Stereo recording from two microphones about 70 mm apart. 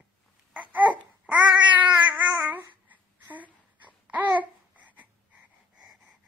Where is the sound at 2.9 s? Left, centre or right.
Right.